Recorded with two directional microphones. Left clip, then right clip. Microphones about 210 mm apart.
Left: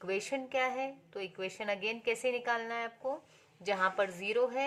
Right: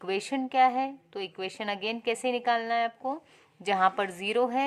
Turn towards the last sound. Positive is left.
turn(degrees=-35)  # may be behind; listen again after turning